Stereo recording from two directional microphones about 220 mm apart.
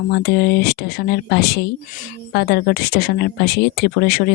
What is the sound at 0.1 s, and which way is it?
Speech, 50° left (ahead or behind).